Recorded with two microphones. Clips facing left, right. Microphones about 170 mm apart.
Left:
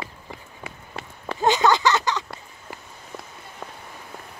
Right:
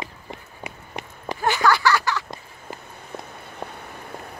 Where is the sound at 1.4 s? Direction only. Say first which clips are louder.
Left 2 dB; 20° left (ahead or behind).